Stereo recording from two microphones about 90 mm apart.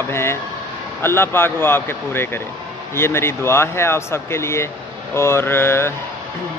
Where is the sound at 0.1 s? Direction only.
30° left (ahead or behind).